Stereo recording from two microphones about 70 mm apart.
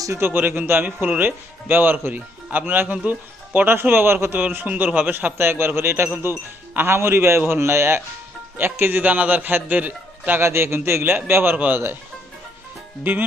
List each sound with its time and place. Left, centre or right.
0.2 s speech: right
8.5 s speech: right
10.4 s speech: right
11.5 s speech: right